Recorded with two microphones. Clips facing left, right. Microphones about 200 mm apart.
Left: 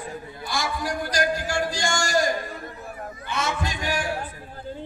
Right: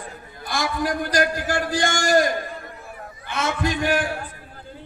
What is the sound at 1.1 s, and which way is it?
A man's voice, 55° right (ahead or behind).